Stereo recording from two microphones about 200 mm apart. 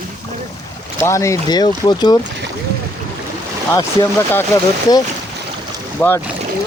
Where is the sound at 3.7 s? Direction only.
15° left (ahead or behind).